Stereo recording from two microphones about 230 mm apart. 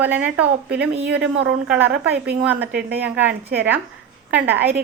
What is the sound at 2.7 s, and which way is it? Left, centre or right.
Speech, right.